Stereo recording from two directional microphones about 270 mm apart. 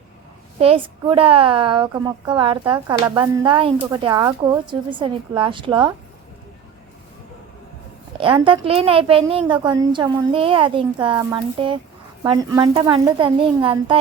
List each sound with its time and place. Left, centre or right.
0.6 s a woman's voice: centre
8.2 s a woman's voice: centre